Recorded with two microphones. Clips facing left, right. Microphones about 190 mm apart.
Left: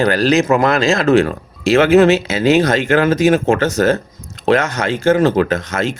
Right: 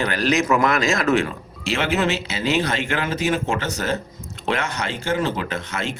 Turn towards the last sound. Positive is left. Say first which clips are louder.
# left 11 dB
turn(degrees=40)  # may be behind; listen again after turning